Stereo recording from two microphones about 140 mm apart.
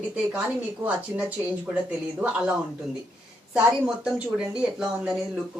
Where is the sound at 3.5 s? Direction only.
5° right (ahead or behind).